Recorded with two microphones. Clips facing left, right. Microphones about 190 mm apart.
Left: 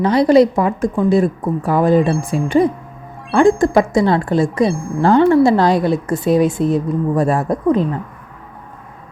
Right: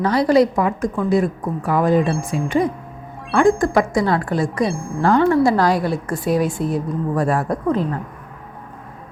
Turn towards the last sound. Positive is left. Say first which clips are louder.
# left 4 dB
turn(degrees=20)  # may be behind; listen again after turning